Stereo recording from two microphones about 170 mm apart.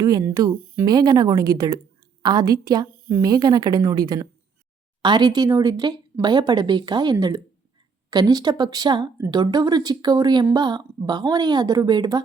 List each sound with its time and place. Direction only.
0.0 s a woman's voice: 20° right (ahead or behind)